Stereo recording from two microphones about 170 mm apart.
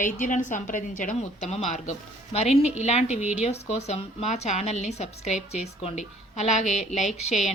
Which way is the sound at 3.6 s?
40° left (ahead or behind).